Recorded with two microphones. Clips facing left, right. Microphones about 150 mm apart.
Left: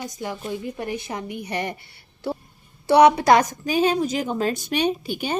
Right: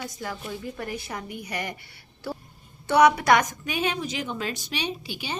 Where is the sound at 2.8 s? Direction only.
30° left (ahead or behind).